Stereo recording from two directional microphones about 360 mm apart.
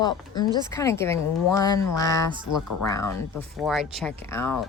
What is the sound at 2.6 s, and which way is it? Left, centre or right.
Speech, left.